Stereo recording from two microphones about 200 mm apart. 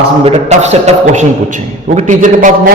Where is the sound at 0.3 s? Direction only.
35° right (ahead or behind).